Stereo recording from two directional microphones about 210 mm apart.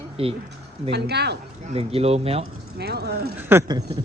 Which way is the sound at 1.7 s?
30° right (ahead or behind).